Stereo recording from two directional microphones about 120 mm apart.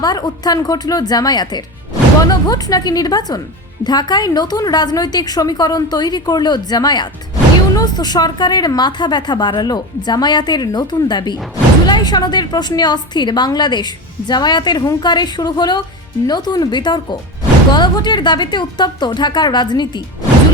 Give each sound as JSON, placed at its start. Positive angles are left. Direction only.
{"t": 0.0, "sound": "a woman's voice", "side_deg": 35}